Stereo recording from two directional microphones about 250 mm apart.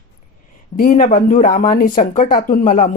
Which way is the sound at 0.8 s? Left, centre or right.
Left.